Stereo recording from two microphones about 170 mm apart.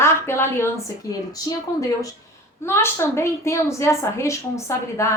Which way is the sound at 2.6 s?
15° left (ahead or behind).